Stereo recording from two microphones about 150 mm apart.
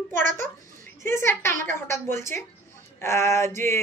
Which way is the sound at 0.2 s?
60° right (ahead or behind).